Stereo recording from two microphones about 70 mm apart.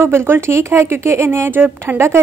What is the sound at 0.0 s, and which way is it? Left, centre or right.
A woman's voice, right.